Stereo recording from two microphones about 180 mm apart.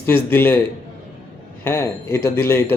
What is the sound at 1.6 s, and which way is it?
Speech, 15° left (ahead or behind).